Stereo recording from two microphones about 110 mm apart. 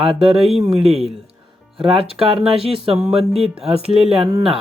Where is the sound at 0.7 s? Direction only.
60° right (ahead or behind).